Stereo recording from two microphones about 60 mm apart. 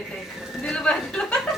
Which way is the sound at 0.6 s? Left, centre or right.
Centre.